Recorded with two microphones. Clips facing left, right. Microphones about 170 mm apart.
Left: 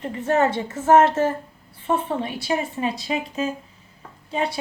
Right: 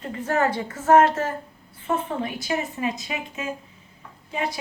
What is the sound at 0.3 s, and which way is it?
Speech, 25° left (ahead or behind).